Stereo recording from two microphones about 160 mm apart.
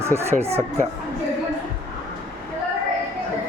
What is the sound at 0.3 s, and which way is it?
Speech, 40° right (ahead or behind).